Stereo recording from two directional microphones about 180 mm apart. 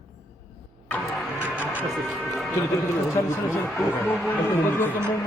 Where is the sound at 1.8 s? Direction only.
10° right (ahead or behind).